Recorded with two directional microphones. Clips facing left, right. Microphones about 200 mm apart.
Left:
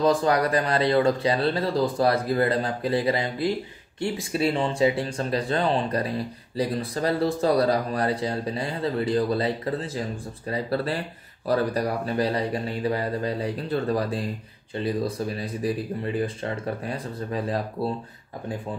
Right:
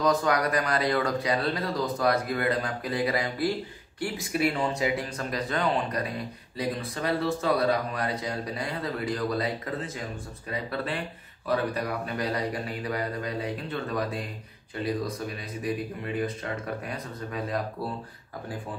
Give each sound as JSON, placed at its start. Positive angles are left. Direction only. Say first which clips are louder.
{"t": 0.0, "sound": "speech", "louder": "left 3 dB", "side_deg": 30}